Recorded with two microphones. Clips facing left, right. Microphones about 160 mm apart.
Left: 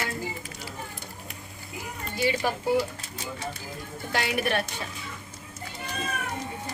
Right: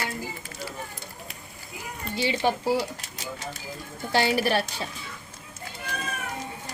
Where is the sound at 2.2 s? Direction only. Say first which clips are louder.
Right 1 dB; 25° right (ahead or behind).